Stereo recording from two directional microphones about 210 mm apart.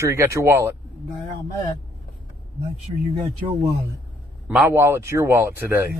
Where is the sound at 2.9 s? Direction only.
25° right (ahead or behind).